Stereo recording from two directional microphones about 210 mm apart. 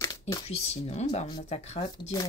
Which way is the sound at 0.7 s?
30° left (ahead or behind).